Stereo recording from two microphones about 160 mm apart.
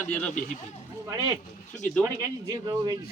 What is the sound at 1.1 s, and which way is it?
Speech, 25° right (ahead or behind).